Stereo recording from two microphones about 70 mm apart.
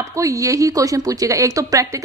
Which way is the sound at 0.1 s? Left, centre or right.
Right.